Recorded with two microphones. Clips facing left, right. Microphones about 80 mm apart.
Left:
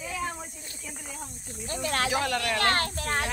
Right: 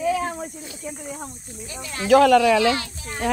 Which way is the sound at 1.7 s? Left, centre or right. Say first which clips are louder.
Left 4 dB; left.